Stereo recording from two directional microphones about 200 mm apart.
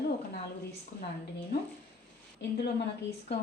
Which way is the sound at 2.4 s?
55° left (ahead or behind).